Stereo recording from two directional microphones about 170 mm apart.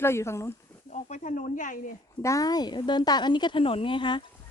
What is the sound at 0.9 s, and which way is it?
Speech, 45° left (ahead or behind).